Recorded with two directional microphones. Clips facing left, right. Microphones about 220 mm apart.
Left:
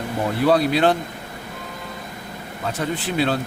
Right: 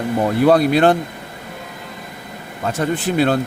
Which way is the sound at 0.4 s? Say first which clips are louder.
Right 4 dB; 50° right (ahead or behind).